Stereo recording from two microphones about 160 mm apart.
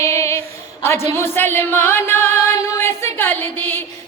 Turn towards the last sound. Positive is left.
turn(degrees=15)  # may be behind; listen again after turning